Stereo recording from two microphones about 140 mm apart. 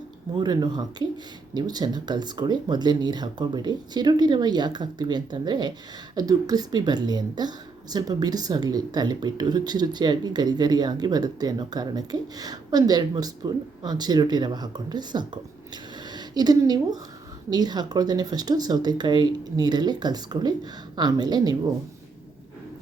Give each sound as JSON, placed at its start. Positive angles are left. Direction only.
{"t": 0.3, "sound": "a woman's voice", "side_deg": -30}